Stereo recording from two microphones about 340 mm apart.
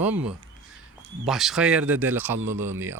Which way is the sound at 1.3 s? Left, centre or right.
Centre.